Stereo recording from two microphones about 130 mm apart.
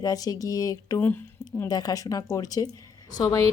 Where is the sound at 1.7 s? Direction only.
30° left (ahead or behind).